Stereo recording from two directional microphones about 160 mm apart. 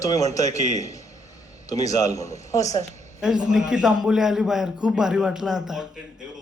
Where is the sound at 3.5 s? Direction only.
5° right (ahead or behind).